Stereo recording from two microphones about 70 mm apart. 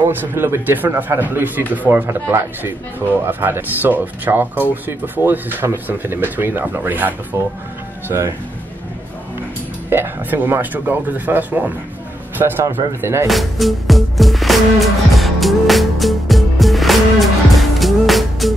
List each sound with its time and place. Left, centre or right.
0.0 s speech: right
2.0 s speech: right
8.1 s speech: right
9.8 s speech: right
13.3 s music: centre